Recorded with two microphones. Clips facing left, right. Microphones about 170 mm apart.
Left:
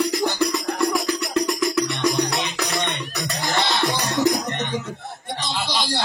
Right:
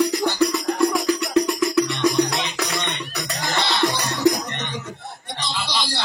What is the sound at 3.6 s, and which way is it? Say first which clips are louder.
Music: right 1 dB; 50° left (ahead or behind).